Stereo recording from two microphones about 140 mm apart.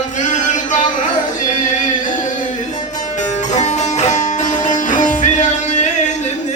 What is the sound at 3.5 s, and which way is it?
Music, 55° left (ahead or behind).